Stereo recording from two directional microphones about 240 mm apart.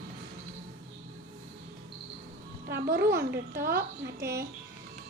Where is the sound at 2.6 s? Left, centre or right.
Right.